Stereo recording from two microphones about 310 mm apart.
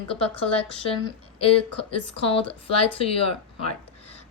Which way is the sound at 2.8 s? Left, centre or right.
Centre.